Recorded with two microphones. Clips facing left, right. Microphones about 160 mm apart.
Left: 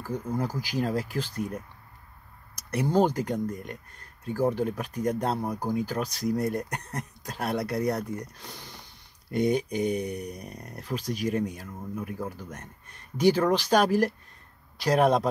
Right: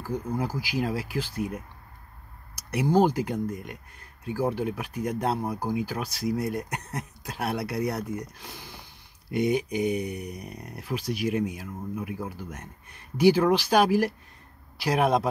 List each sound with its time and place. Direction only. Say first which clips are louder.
0.0 s speech: right 1 dB; 10° right (ahead or behind)